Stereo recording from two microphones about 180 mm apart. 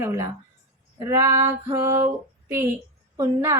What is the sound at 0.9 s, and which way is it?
A woman's voice, 15° right (ahead or behind).